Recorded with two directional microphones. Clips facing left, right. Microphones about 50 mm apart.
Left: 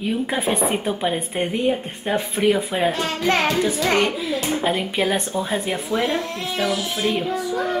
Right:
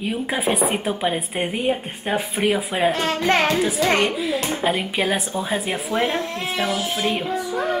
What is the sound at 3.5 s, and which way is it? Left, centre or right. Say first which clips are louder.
Speech: even; centre.